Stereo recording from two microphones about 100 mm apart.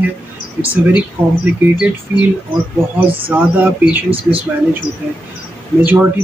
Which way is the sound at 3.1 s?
65° right (ahead or behind).